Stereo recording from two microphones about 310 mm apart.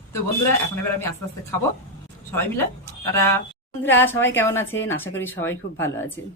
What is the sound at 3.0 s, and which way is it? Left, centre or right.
Speech, centre.